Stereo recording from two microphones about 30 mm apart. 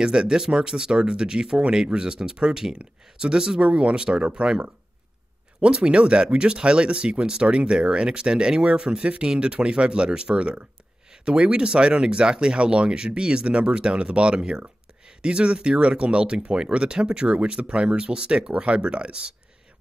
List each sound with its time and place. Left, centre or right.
0.0 s speech: right